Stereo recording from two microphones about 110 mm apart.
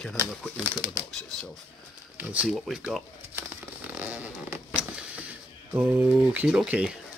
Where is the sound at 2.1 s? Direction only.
10° right (ahead or behind).